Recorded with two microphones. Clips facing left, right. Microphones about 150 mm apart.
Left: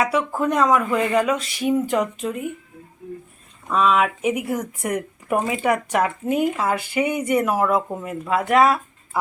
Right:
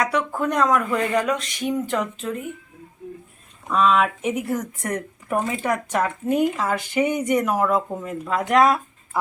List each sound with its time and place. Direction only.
0.0 s speech: 5° left (ahead or behind)
3.7 s speech: 5° left (ahead or behind)